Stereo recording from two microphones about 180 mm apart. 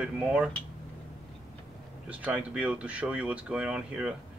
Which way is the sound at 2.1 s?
10° right (ahead or behind).